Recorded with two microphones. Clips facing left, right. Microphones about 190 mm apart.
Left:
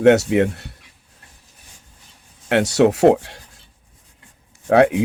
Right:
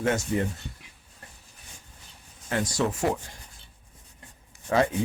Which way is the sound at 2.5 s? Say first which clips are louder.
Left 12 dB; 75° left (ahead or behind).